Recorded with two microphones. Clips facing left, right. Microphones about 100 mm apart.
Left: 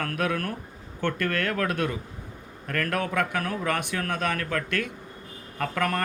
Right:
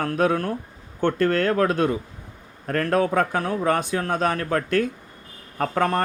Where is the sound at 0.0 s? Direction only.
30° right (ahead or behind).